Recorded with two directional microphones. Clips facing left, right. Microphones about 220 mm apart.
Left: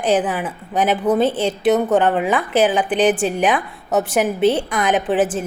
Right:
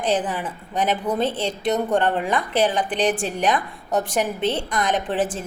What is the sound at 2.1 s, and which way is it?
Speech, 85° left.